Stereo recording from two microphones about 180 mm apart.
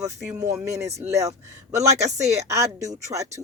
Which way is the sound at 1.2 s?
40° right (ahead or behind).